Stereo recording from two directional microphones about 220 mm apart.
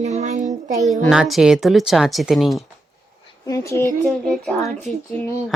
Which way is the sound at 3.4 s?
15° left (ahead or behind).